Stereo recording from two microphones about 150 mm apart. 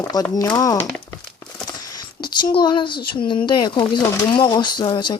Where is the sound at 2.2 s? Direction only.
30° left (ahead or behind).